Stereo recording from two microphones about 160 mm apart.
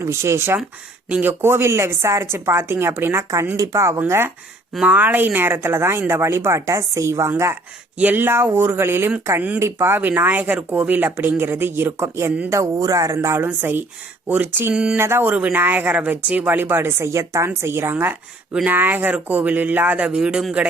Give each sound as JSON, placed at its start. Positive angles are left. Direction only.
{"t": 0.0, "sound": "speech", "side_deg": -15}